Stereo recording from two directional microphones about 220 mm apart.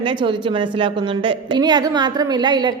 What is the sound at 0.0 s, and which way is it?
A woman's voice, 20° right (ahead or behind).